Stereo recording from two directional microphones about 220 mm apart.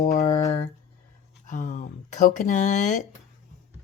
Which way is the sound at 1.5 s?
35° left (ahead or behind).